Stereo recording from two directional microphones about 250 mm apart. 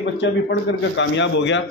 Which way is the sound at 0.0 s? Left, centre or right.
Left.